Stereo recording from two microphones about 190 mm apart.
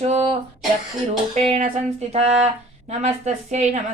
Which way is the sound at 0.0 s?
35° right (ahead or behind).